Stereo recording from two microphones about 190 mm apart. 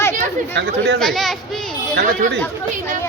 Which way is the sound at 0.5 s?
65° right (ahead or behind).